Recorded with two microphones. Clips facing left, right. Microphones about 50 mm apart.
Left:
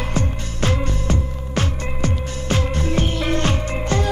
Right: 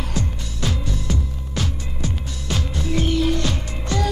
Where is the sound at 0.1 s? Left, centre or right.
Left.